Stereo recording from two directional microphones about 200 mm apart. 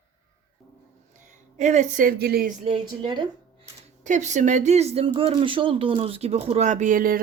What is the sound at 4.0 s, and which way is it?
Speech, 35° right (ahead or behind).